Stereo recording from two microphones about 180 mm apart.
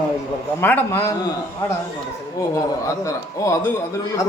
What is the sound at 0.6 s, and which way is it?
Speech, 10° left (ahead or behind).